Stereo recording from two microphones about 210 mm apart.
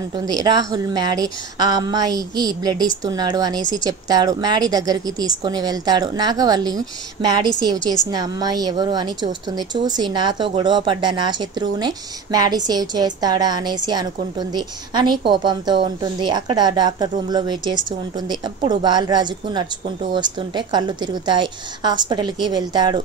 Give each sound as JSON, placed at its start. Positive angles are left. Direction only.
{"t": 0.1, "sound": "a woman's voice", "side_deg": -20}